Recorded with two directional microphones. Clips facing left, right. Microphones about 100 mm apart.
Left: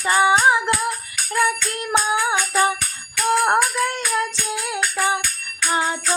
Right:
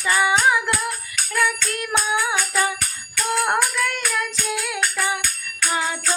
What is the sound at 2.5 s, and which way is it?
Jingle bell, 25° left (ahead or behind).